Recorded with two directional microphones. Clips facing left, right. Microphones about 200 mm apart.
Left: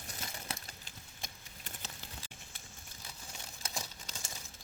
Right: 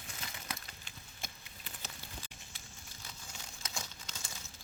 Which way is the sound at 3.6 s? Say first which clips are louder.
Left 2 dB; 35° left (ahead or behind).